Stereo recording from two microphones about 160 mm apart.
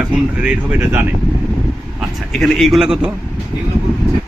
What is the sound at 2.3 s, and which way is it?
Speech, centre (ahead or behind).